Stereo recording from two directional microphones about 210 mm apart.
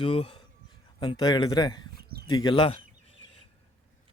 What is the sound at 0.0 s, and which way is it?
Speech, 25° left (ahead or behind).